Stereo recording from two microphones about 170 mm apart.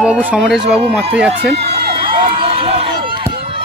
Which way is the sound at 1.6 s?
35° right (ahead or behind).